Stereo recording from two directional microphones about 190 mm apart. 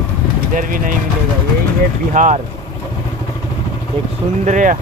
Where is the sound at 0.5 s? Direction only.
45° right (ahead or behind).